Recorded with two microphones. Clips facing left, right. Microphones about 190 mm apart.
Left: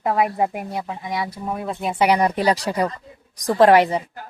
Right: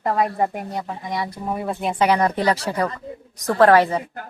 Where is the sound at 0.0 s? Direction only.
Centre (ahead or behind).